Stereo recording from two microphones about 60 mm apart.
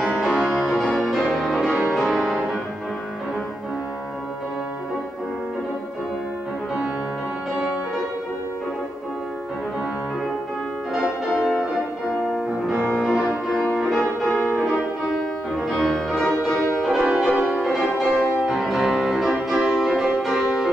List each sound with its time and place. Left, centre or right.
0.2 s music: centre
10.9 s music: centre
12.9 s music: centre
13.3 s music: left
13.7 s music: centre
17.0 s music: centre